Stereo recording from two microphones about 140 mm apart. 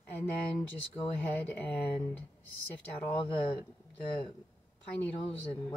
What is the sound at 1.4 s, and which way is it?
Speech, 15° left (ahead or behind).